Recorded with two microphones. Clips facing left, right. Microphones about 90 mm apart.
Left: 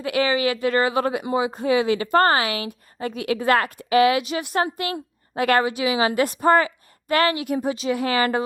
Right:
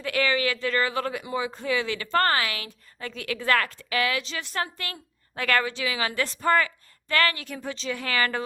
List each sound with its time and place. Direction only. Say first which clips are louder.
0.0 s speech: left 4 dB; 30° left (ahead or behind)